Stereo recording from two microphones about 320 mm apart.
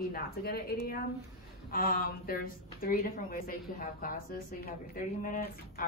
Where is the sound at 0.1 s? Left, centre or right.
Left.